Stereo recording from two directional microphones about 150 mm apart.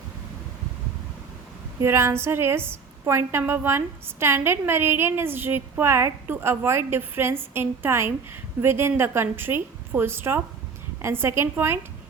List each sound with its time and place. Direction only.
1.8 s a woman's voice: 15° right (ahead or behind)